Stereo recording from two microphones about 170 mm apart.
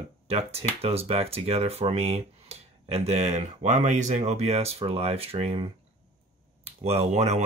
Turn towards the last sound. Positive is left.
turn(degrees=-40)  # may be behind; listen again after turning